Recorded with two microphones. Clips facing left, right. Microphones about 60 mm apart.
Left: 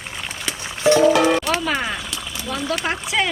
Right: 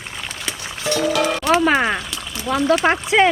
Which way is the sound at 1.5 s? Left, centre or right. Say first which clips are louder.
Right 7 dB; right.